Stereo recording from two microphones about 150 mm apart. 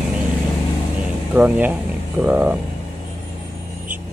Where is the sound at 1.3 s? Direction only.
10° right (ahead or behind).